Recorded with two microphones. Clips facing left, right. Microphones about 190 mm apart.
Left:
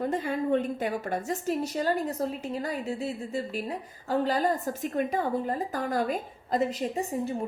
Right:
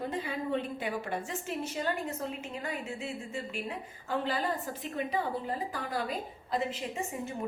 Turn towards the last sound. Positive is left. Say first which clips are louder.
# left 6 dB
turn(degrees=35)  # may be behind; listen again after turning